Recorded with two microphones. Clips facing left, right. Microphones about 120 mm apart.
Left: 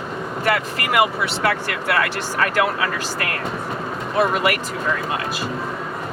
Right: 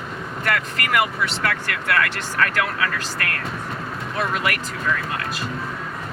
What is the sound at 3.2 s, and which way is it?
Speech, 10° left (ahead or behind).